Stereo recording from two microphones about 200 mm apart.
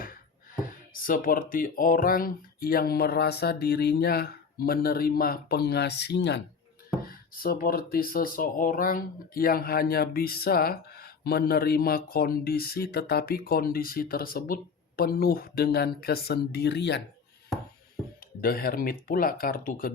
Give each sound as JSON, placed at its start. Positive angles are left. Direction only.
{"t": 1.0, "sound": "speech", "side_deg": 45}
{"t": 7.0, "sound": "speech", "side_deg": 45}
{"t": 18.3, "sound": "speech", "side_deg": 45}